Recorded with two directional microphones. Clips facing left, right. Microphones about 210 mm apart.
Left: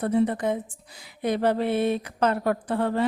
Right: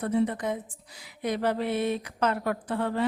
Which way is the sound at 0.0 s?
35° left (ahead or behind).